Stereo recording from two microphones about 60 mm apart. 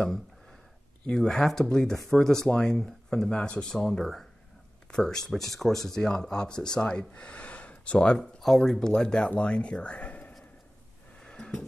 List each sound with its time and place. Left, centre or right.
1.0 s speech: centre
8.2 s speech: centre; by 10.3 s left
11.1 s music: centre